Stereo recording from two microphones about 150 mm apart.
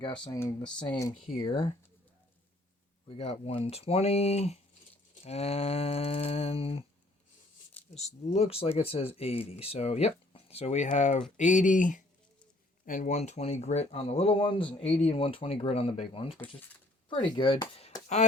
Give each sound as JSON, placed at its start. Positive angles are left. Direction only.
{"t": 0.3, "sound": "speech", "side_deg": 20}
{"t": 1.2, "sound": "speech", "side_deg": 35}
{"t": 3.1, "sound": "speech", "side_deg": 45}
{"t": 7.9, "sound": "speech", "side_deg": 45}